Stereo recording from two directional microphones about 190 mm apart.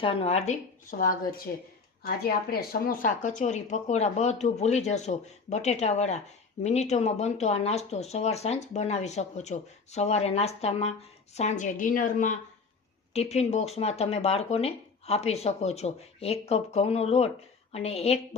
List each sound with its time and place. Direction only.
0.0 s a woman's voice: 30° left (ahead or behind)